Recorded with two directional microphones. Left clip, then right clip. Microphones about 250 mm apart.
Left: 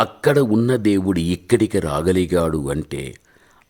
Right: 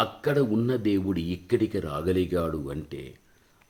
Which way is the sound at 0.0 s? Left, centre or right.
Left.